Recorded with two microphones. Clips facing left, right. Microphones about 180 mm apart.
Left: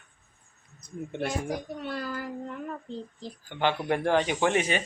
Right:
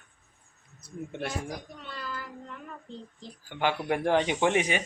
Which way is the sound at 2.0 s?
45° left (ahead or behind).